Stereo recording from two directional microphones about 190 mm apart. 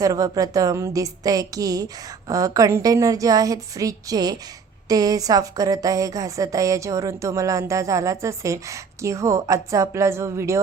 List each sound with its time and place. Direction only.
0.0 s a woman's voice: 20° right (ahead or behind)